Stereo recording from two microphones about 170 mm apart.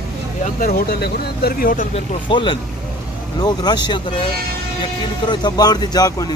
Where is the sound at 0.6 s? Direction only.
65° left (ahead or behind).